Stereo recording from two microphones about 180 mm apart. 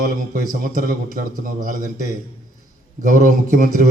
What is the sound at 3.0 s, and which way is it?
Speech, 45° right (ahead or behind).